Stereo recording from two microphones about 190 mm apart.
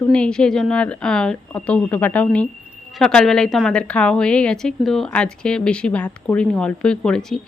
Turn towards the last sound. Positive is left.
turn(degrees=5)  # may be behind; listen again after turning